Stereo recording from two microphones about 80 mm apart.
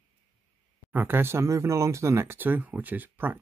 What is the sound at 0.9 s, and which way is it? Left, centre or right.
Speech, right.